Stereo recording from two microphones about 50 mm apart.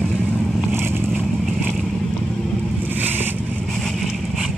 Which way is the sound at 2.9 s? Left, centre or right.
Right.